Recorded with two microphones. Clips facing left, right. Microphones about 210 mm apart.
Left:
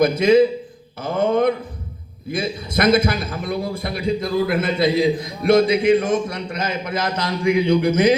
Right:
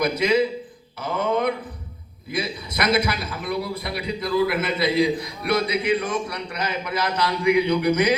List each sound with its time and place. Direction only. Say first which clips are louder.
0.0 s a man's voice: left 6 dB; 50° left (ahead or behind)